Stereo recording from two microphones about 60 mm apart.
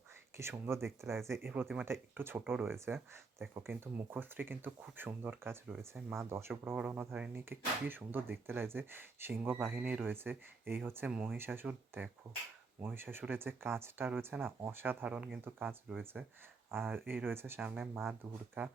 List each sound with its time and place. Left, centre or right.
0.3 s speech: right
6.7 s speech: right
7.3 s speech: right
15.0 s speech: right
15.4 s speech: right
16.2 s speech: centre
16.7 s speech: right